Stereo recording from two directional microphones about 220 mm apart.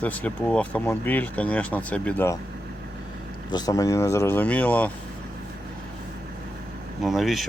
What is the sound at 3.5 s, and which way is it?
Speech, 15° left (ahead or behind).